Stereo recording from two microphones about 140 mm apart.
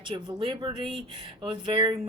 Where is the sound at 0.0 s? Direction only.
35° right (ahead or behind).